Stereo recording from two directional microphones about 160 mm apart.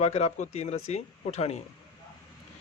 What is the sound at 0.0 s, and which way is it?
Speech, 45° left (ahead or behind).